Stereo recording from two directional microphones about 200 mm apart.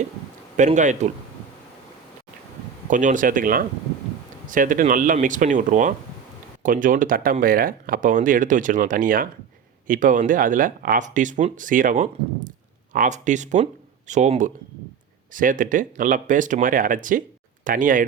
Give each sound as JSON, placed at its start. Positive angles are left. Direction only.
{"t": 0.5, "sound": "speech", "side_deg": -35}
{"t": 2.9, "sound": "speech", "side_deg": -40}